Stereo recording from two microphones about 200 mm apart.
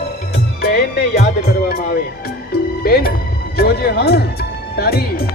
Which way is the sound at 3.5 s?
50° left (ahead or behind).